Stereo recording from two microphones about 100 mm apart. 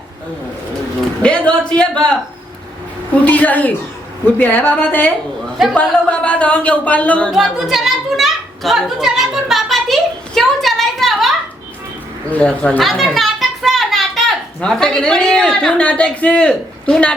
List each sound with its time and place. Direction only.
1.2 s a woman's voice: 10° left (ahead or behind)
3.2 s a woman's voice: 15° left (ahead or behind)
7.3 s a woman's voice: centre (ahead or behind)
12.3 s a woman's voice: 10° left (ahead or behind)
12.8 s a child's voice: centre (ahead or behind)